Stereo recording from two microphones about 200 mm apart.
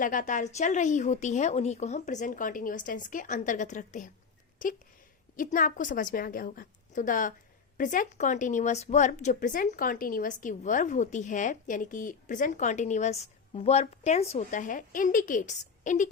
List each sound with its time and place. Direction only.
0.0 s a woman's voice: 40° left (ahead or behind)